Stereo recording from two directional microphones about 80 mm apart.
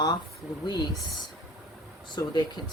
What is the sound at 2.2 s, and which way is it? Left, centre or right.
Speech, left.